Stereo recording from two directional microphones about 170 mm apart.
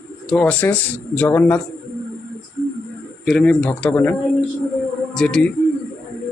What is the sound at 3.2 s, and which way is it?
Speech, 5° left (ahead or behind).